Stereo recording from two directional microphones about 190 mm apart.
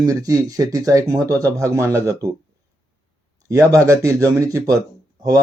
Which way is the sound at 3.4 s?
15° right (ahead or behind).